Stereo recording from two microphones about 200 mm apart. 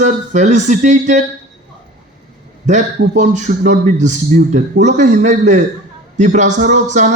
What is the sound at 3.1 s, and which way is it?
A man's voice, 35° right (ahead or behind).